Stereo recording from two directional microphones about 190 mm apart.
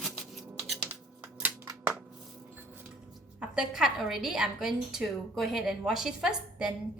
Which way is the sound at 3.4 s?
5° right (ahead or behind).